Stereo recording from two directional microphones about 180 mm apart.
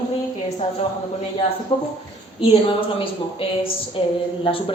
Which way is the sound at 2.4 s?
30° left (ahead or behind).